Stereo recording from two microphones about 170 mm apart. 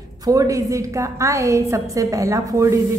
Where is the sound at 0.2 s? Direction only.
20° right (ahead or behind).